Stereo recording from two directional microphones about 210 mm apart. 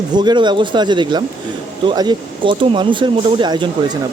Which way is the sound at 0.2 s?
20° right (ahead or behind).